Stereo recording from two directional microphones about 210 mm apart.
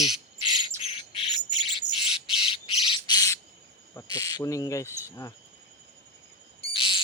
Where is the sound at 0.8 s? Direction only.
25° left (ahead or behind).